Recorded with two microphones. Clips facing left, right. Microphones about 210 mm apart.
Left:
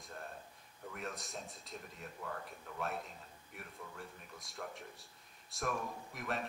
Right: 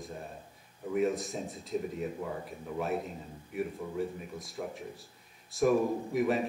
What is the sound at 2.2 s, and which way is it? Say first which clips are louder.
Speech: right 8 dB; 15° right (ahead or behind).